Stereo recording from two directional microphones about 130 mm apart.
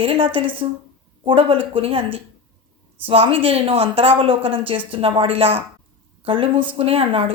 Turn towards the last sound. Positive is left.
turn(degrees=-45)  # may be behind; listen again after turning